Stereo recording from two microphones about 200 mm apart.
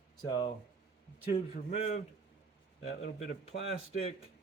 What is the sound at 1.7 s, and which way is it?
Speech, 35° left (ahead or behind).